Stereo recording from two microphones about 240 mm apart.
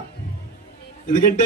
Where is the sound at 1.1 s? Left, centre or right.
Left.